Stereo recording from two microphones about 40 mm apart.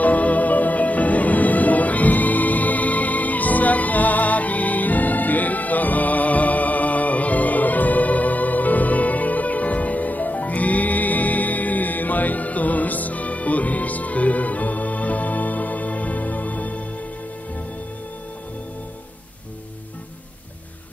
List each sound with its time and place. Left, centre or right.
0.0 s music: left